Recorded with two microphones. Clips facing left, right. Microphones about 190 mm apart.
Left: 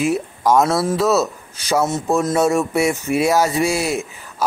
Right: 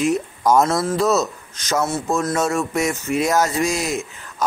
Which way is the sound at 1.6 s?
15° left (ahead or behind).